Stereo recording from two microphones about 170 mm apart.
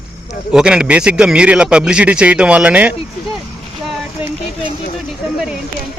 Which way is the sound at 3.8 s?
Centre (ahead or behind).